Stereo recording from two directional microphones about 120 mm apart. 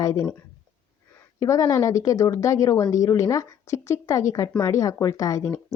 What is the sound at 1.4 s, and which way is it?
Speech, 25° left (ahead or behind).